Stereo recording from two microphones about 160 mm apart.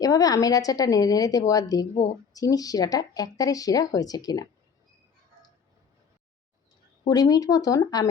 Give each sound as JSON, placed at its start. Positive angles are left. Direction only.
{"t": 0.0, "sound": "speech", "side_deg": 20}
{"t": 7.1, "sound": "speech", "side_deg": 25}